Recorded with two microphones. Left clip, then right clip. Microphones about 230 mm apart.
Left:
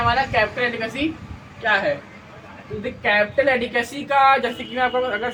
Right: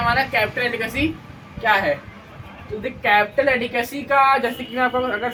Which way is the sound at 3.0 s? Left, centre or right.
Centre.